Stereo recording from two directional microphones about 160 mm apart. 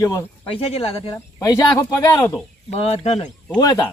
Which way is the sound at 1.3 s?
20° left (ahead or behind).